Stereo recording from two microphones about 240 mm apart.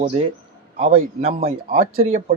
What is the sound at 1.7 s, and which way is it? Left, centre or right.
Speech, right.